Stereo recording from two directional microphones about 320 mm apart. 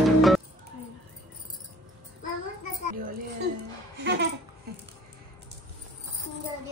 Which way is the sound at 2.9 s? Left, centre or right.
Right.